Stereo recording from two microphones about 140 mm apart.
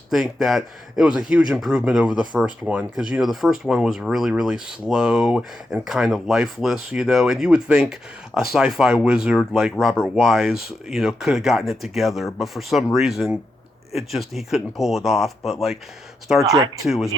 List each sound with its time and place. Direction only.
0.1 s speech: centre (ahead or behind)
16.4 s speech: 25° right (ahead or behind)
16.8 s speech: centre (ahead or behind)